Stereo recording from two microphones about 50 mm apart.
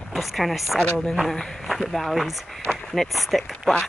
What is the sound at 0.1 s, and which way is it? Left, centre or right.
Speech, centre.